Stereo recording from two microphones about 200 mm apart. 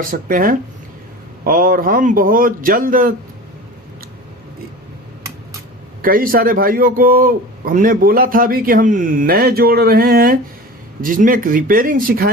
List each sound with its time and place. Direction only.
0.0 s a man's voice: 45° right (ahead or behind)
6.0 s a man's voice: 45° right (ahead or behind)